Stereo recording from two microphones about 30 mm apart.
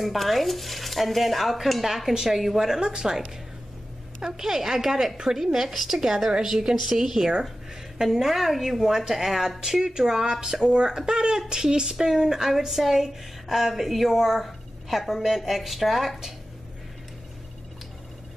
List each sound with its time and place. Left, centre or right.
0.0 s speech: centre
4.2 s speech: centre
10.7 s speech: right; by 16.2 s centre